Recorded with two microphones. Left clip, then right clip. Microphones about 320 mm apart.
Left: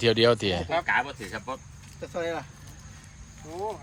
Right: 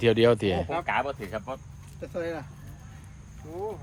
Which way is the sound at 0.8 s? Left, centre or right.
Centre.